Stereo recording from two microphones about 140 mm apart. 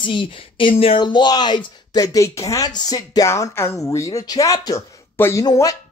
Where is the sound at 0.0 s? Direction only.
35° left (ahead or behind).